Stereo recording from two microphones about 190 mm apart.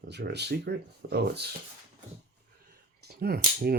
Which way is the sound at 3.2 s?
55° right (ahead or behind).